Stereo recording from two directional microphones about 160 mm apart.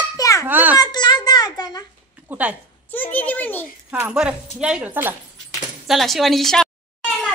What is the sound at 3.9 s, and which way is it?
Speech, 10° right (ahead or behind).